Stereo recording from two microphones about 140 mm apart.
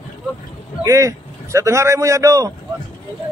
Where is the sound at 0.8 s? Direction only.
25° right (ahead or behind).